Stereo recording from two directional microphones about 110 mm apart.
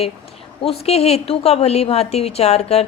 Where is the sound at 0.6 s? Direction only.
65° left (ahead or behind).